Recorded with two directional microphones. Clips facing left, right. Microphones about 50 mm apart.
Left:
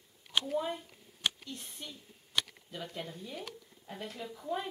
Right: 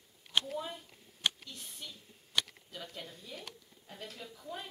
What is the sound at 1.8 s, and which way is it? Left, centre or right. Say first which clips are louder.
Speech: left 2 dB; centre.